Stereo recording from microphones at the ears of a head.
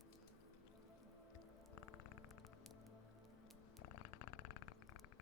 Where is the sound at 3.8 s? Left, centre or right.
Left.